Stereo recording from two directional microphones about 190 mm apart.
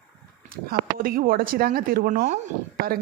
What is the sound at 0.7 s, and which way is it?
Speech, 50° right (ahead or behind).